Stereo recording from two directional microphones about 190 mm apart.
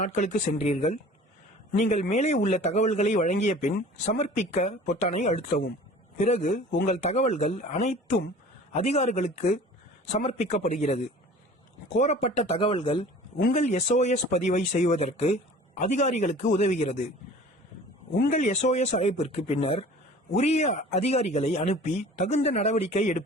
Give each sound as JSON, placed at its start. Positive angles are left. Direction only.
{"t": 0.0, "sound": "speech", "side_deg": 35}
{"t": 13.4, "sound": "speech", "side_deg": 40}
{"t": 18.3, "sound": "speech", "side_deg": 40}